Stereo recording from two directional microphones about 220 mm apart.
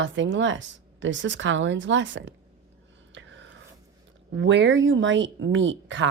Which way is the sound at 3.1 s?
55° right (ahead or behind).